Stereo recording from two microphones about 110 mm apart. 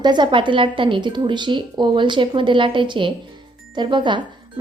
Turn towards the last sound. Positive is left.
turn(degrees=-45)  # may be behind; listen again after turning